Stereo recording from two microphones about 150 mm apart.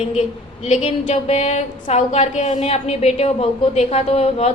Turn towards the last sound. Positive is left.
turn(degrees=45)  # may be behind; listen again after turning